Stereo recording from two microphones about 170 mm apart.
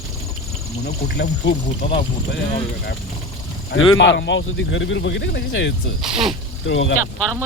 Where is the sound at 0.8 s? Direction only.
80° left.